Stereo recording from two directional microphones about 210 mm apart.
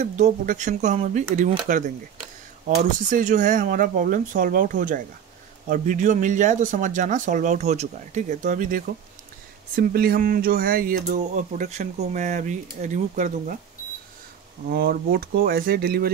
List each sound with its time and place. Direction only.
0.0 s speech: 35° right (ahead or behind)
3.1 s speech: 40° right (ahead or behind)
14.7 s speech: 45° right (ahead or behind)